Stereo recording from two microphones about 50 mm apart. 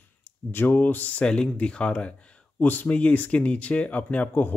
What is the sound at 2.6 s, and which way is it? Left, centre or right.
Speech, left.